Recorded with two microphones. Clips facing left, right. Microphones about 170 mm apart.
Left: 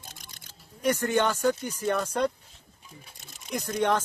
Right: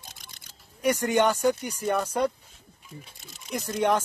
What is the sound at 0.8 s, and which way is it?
Speech, 10° right (ahead or behind).